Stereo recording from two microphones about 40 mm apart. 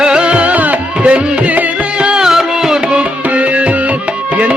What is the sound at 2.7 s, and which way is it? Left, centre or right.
Music, right.